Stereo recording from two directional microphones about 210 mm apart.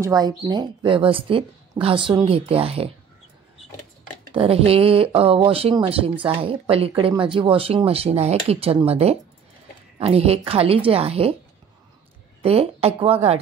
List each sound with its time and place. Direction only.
0.0 s a woman's voice: 20° right (ahead or behind)
4.3 s a woman's voice: 25° right (ahead or behind)
12.4 s a woman's voice: 30° right (ahead or behind)